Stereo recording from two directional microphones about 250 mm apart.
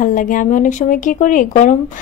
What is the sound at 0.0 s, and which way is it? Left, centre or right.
A woman's voice, left.